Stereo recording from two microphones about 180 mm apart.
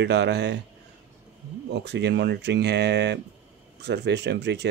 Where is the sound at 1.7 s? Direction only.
70° right (ahead or behind).